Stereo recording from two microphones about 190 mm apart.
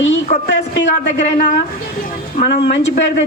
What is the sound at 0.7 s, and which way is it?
Speech, 65° left (ahead or behind).